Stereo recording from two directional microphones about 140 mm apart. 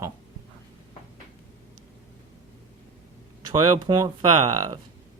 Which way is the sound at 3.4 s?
30° right (ahead or behind).